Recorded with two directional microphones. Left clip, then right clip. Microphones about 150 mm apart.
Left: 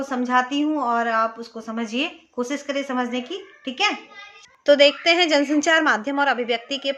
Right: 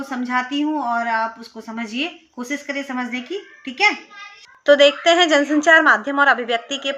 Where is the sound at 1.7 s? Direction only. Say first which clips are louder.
Even; 20° left (ahead or behind).